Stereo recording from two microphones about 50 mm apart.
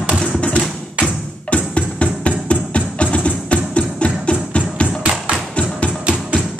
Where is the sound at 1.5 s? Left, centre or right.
Left.